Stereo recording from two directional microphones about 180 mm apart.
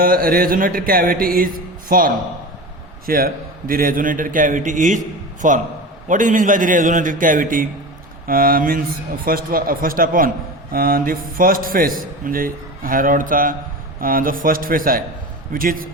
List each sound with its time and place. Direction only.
0.0 s a man's voice: 55° right (ahead or behind)